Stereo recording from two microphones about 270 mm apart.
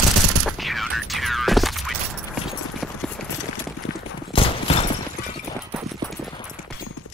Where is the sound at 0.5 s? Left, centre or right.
Centre.